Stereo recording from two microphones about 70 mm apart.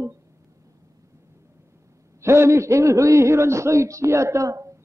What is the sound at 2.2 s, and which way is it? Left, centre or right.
A man's voice, right.